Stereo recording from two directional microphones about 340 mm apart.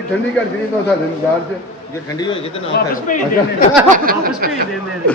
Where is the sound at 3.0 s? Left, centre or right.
Left.